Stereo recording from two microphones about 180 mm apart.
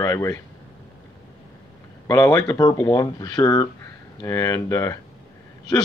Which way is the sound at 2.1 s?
20° left (ahead or behind).